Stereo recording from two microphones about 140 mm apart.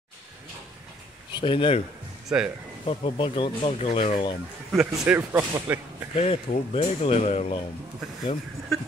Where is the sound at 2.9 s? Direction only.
35° left (ahead or behind).